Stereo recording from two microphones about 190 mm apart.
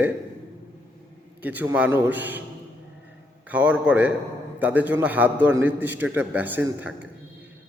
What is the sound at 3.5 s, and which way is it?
A man's voice, 10° right (ahead or behind).